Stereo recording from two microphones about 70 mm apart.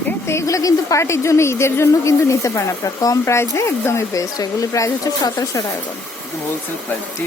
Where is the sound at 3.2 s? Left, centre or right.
Left.